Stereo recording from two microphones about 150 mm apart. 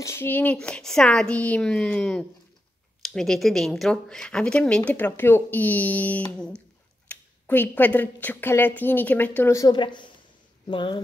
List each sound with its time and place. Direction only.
0.0 s speech: 15° left (ahead or behind)